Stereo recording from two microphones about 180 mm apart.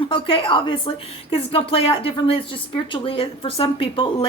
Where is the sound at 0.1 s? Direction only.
30° left (ahead or behind).